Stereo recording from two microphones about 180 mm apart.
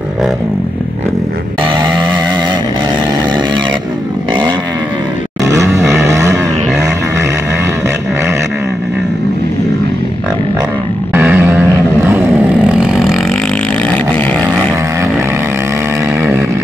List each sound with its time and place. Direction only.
5.6 s a sound: 15° right (ahead or behind)
11.1 s grunt: 15° right (ahead or behind)
12.1 s vehicle: 15° right (ahead or behind)
16.2 s chainsaw: 10° right (ahead or behind)